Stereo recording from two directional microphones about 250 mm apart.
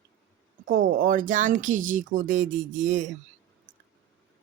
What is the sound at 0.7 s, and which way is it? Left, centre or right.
Speech, right.